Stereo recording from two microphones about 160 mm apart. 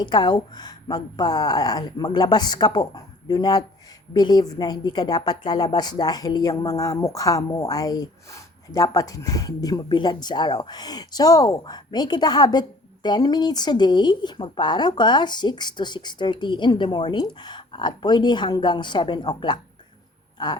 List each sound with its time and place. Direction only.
0.0 s speech: 25° left (ahead or behind)